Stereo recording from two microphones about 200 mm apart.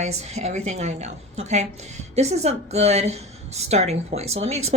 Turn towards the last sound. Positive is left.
turn(degrees=-30)  # may be behind; listen again after turning